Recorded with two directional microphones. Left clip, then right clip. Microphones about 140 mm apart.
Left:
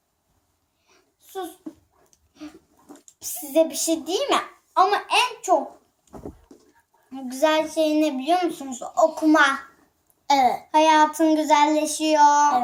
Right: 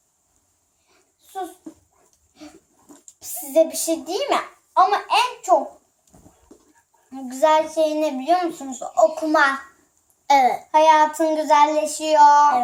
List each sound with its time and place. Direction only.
2.0 s dog: 30° right (ahead or behind)
3.2 s a child's voice: 35° right (ahead or behind)
7.1 s a child's voice: 35° right (ahead or behind)
10.2 s child singing: 20° right (ahead or behind)